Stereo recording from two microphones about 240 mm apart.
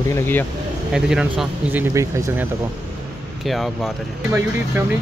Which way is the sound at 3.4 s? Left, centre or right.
Centre.